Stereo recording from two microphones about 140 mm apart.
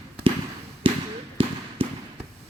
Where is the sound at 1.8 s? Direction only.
40° right (ahead or behind).